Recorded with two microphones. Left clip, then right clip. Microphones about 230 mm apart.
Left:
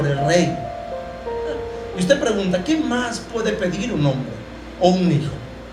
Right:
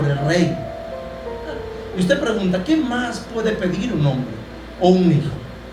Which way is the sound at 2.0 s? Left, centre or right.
Left.